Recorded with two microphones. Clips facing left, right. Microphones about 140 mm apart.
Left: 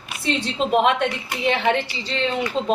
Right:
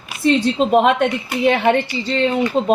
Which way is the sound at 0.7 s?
50° right (ahead or behind).